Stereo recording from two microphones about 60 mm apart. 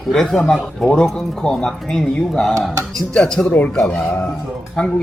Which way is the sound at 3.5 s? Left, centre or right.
Left.